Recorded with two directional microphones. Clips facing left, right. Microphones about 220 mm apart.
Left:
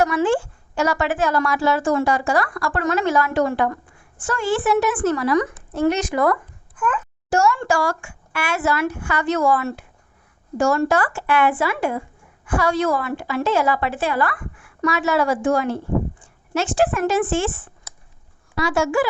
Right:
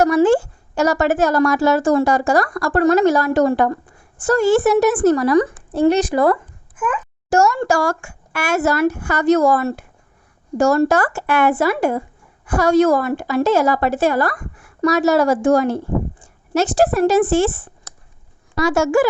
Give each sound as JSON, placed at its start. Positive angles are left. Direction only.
{"t": 0.0, "sound": "a woman's voice", "side_deg": -40}
{"t": 7.3, "sound": "a woman's voice", "side_deg": -45}